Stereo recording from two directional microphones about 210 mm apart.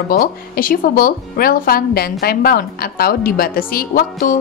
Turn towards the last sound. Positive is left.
turn(degrees=45)  # may be behind; listen again after turning